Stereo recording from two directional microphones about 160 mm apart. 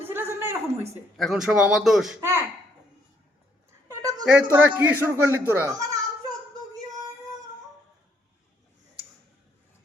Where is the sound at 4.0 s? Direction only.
25° right (ahead or behind).